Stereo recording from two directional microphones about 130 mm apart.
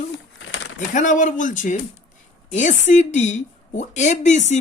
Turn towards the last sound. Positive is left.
turn(degrees=65)  # may be behind; listen again after turning